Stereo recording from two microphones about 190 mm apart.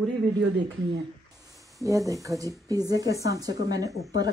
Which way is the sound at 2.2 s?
15° right (ahead or behind).